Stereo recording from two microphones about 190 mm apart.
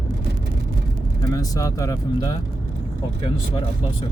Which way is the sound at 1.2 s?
20° left (ahead or behind).